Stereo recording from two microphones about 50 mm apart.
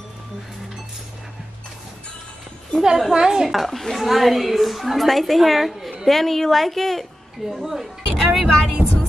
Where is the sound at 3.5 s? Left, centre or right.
Centre.